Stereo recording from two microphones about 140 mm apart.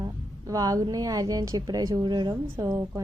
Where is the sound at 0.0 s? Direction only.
25° right (ahead or behind).